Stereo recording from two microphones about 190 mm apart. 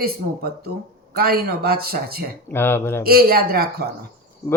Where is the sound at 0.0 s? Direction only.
55° right (ahead or behind).